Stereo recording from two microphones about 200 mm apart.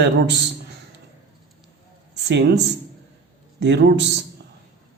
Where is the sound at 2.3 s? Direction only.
60° right (ahead or behind).